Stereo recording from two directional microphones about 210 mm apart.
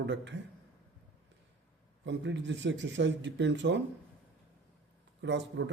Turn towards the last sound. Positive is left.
turn(degrees=-60)  # may be behind; listen again after turning